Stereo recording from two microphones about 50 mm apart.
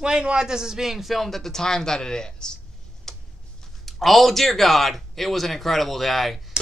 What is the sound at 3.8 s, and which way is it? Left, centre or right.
Speech, centre.